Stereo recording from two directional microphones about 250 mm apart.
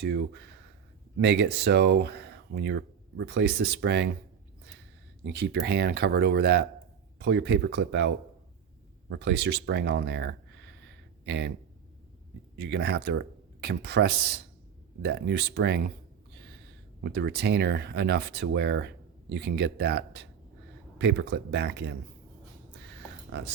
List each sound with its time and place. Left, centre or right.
0.0 s speech: right
5.2 s speech: right
12.5 s speech: right
17.0 s speech: right